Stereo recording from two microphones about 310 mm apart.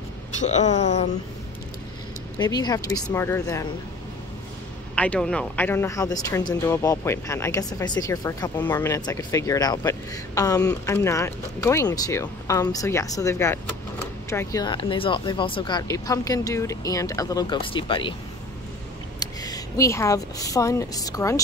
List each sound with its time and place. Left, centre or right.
0.4 s speech: left
2.3 s speech: centre
4.9 s speech: centre
19.4 s speech: centre